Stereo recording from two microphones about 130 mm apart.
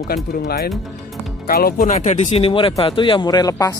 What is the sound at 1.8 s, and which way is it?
Speech, 70° left (ahead or behind).